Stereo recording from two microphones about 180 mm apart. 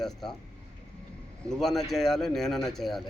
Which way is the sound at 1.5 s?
Centre (ahead or behind).